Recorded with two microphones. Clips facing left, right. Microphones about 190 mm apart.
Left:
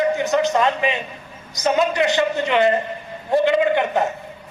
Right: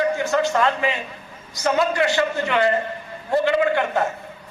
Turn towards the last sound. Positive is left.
turn(degrees=20)  # may be behind; listen again after turning